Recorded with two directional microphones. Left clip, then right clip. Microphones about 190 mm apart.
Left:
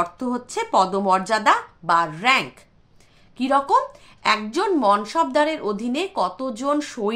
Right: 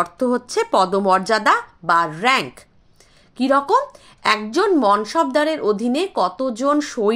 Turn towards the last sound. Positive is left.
turn(degrees=-30)  # may be behind; listen again after turning